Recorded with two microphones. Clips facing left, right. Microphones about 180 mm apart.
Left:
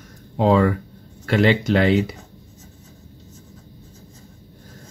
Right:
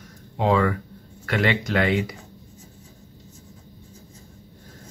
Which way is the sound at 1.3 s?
30° left (ahead or behind).